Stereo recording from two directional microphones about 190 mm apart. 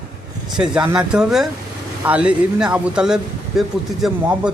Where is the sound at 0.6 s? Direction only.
5° right (ahead or behind).